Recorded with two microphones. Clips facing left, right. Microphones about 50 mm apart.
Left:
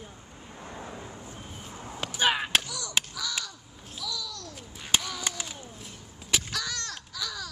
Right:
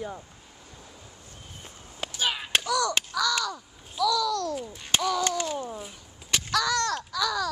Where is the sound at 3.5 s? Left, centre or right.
Right.